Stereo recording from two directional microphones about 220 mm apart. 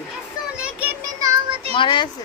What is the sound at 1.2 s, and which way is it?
Music, 25° right (ahead or behind).